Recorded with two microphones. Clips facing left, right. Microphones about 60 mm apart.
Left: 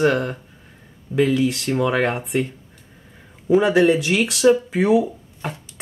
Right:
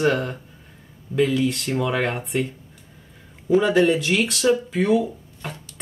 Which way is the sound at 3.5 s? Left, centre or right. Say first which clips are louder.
Left 2 dB; centre.